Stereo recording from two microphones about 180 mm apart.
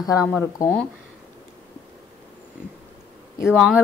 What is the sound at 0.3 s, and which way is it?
Speech, 10° left (ahead or behind).